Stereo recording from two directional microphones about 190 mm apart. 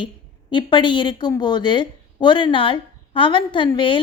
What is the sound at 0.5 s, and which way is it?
A woman's voice, 25° left (ahead or behind).